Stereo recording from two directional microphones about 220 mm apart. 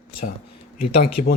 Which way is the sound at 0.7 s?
45° left (ahead or behind).